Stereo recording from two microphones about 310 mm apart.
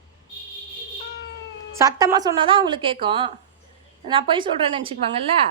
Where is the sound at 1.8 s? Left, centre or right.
Centre.